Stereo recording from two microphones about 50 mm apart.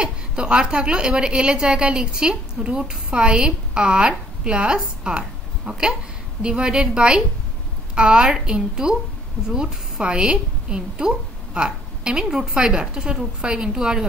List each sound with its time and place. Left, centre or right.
0.0 s a woman's voice: centre